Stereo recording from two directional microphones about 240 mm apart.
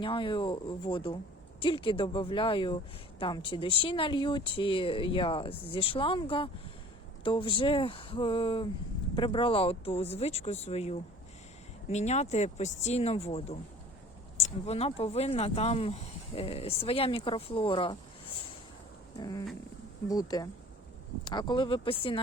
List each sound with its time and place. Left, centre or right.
0.0 s speech: left
19.2 s speech: centre